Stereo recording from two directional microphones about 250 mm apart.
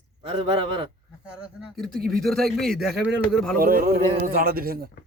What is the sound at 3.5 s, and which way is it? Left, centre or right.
A man's voice, right.